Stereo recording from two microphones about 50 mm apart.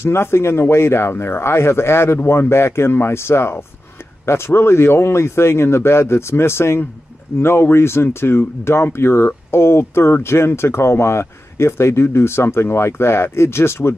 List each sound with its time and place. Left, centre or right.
0.0 s speech: left
7.3 s speech: left